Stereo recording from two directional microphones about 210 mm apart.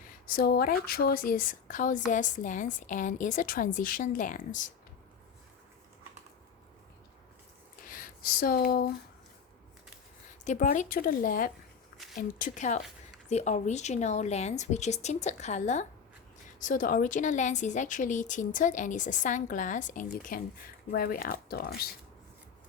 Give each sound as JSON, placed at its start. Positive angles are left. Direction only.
{"t": 0.3, "sound": "a woman's voice", "side_deg": 45}
{"t": 7.9, "sound": "speech", "side_deg": 40}
{"t": 10.4, "sound": "a woman's voice", "side_deg": 35}
{"t": 12.0, "sound": "a sound", "side_deg": 0}
{"t": 12.4, "sound": "a woman's voice", "side_deg": 35}